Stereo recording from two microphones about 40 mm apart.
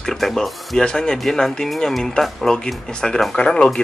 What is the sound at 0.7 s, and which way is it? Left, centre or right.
Speech, centre.